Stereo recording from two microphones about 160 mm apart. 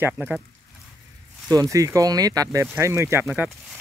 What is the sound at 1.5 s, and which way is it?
Speech, 20° right (ahead or behind).